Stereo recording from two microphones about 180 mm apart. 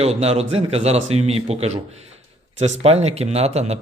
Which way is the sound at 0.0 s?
35° right (ahead or behind).